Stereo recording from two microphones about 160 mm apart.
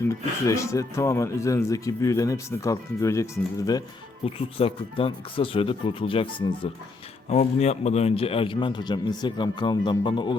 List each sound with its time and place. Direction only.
0.1 s speech: 20° left (ahead or behind)
4.4 s speech: 35° left (ahead or behind)